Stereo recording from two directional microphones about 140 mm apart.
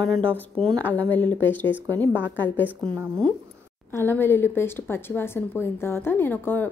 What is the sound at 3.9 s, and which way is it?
A woman's voice, 15° left (ahead or behind).